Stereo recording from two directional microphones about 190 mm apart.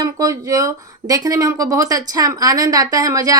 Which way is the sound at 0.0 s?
20° right (ahead or behind).